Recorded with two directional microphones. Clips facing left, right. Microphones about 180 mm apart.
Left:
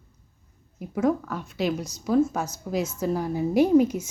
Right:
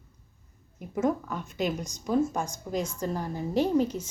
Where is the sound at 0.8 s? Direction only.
Centre (ahead or behind).